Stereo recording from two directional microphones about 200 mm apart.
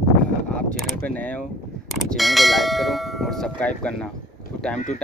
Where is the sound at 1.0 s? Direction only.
5° left (ahead or behind).